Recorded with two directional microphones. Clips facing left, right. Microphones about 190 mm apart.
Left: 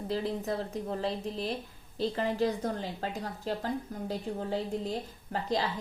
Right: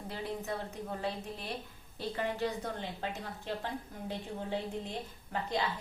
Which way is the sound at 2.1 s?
40° left (ahead or behind).